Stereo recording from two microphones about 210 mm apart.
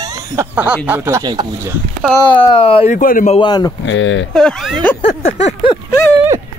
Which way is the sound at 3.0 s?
40° left (ahead or behind).